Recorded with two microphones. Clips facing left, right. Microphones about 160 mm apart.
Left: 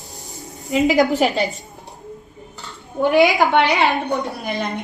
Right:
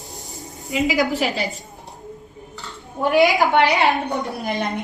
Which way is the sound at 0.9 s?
45° left (ahead or behind).